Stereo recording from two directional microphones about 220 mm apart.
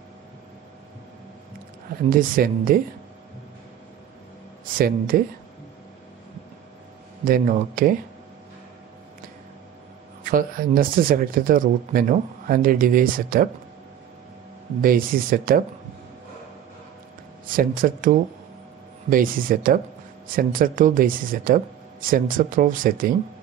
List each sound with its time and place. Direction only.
2.0 s speech: 40° right (ahead or behind)
4.7 s speech: 40° right (ahead or behind)
7.2 s speech: 40° right (ahead or behind)
10.2 s speech: 40° right (ahead or behind)
14.8 s speech: 40° right (ahead or behind)
17.6 s speech: 40° right (ahead or behind)